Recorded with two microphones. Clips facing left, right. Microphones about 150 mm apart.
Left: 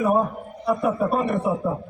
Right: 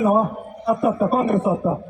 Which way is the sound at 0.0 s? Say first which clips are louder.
Right 3 dB; 25° right (ahead or behind).